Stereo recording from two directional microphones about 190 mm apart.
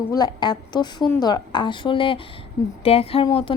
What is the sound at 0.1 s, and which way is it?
A woman's voice, 20° left (ahead or behind).